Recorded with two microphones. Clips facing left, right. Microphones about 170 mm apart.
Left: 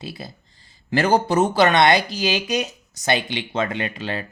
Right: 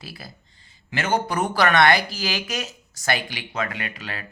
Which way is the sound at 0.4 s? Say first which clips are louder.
Left 8 dB; 35° left (ahead or behind).